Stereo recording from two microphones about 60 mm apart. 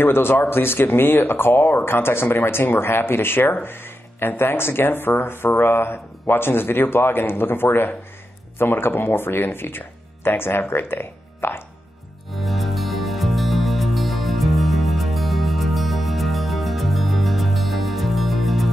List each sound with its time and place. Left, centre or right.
0.0 s speech: left
12.3 s music: centre